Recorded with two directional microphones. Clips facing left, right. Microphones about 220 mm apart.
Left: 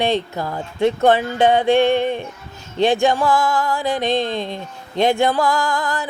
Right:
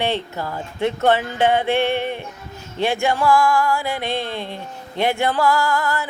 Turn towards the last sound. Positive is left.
turn(degrees=15)  # may be behind; listen again after turning